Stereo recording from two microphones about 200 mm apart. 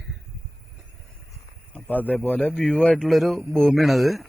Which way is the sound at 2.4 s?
5° left (ahead or behind).